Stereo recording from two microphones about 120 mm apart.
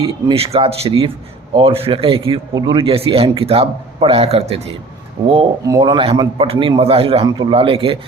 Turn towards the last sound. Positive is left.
turn(degrees=-50)  # may be behind; listen again after turning